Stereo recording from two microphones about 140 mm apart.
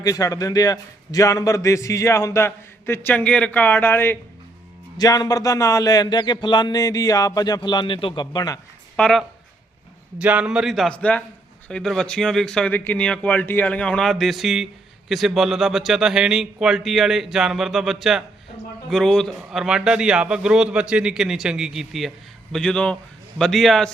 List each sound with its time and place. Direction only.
0.0 s a man's voice: 25° left (ahead or behind)
4.9 s a man's voice: 30° left (ahead or behind)
9.0 s speech: 5° left (ahead or behind)
10.2 s a man's voice: 10° right (ahead or behind)